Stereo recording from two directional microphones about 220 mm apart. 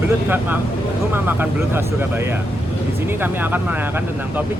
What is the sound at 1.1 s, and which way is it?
Speech, 10° right (ahead or behind).